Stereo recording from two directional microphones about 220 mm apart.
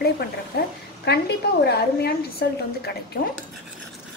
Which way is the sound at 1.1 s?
50° left (ahead or behind).